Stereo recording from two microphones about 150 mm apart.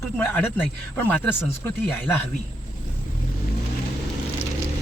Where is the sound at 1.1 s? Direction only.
10° left (ahead or behind).